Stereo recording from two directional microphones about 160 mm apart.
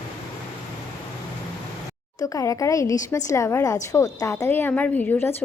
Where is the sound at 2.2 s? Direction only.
20° left (ahead or behind).